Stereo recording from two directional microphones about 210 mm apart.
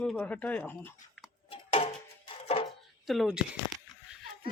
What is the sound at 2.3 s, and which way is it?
Music, 25° left (ahead or behind).